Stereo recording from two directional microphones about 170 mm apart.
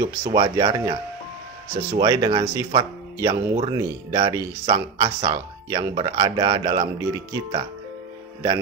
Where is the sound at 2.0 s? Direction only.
30° right (ahead or behind).